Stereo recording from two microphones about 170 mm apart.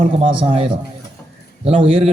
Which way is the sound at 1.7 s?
35° right (ahead or behind).